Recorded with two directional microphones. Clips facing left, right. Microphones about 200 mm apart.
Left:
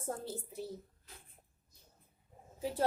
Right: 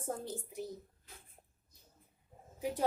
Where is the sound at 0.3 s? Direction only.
15° right (ahead or behind).